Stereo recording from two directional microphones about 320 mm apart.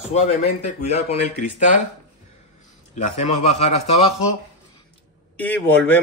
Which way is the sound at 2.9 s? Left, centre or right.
Centre.